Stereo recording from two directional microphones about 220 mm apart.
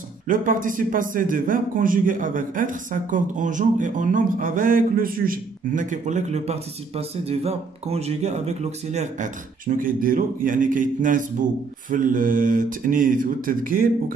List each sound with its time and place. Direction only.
0.3 s a man's voice: 35° right (ahead or behind)